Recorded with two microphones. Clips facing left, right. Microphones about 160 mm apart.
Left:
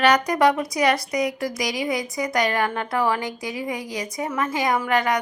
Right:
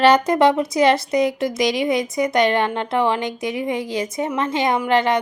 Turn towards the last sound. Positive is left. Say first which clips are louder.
# right 3 dB
turn(degrees=-25)  # may be behind; listen again after turning